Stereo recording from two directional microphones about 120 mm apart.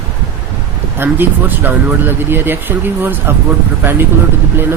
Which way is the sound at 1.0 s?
15° right (ahead or behind).